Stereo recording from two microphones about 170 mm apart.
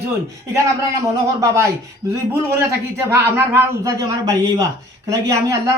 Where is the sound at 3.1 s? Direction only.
15° right (ahead or behind).